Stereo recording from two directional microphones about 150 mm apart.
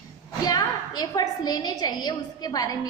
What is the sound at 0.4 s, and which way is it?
A woman's voice, 25° left (ahead or behind).